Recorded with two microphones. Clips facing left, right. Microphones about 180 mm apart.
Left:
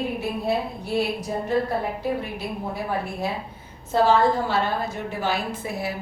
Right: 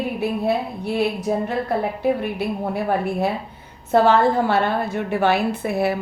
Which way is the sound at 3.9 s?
60° right (ahead or behind).